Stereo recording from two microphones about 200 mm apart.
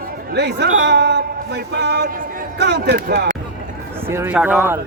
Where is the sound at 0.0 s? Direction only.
55° right (ahead or behind).